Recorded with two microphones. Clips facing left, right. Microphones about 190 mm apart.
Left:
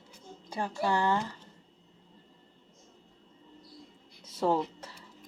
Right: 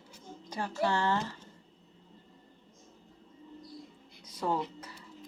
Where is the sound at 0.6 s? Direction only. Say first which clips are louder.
Left 1 dB; 15° left (ahead or behind).